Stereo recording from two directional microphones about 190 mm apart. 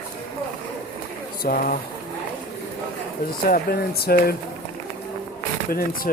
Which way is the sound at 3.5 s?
55° left (ahead or behind).